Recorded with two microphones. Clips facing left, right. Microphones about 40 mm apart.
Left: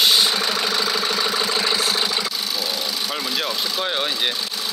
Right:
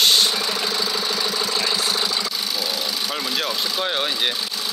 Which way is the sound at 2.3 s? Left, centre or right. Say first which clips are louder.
Even; centre.